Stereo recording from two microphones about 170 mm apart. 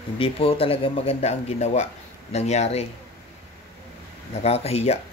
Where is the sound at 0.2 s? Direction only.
35° left (ahead or behind).